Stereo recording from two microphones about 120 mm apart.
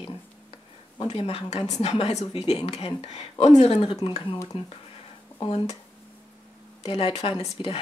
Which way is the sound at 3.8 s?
40° left (ahead or behind).